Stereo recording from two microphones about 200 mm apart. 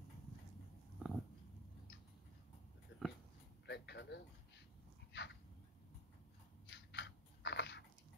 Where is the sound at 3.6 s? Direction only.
60° left (ahead or behind).